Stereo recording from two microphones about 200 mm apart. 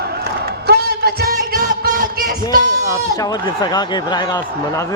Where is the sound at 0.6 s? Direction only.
55° right (ahead or behind).